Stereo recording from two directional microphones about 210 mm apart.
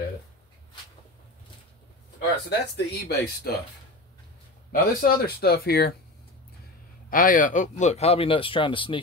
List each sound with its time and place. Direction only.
2.1 s speech: 50° left (ahead or behind)
4.7 s speech: 45° left (ahead or behind)
7.1 s speech: 40° left (ahead or behind); by 9.0 s 25° left (ahead or behind)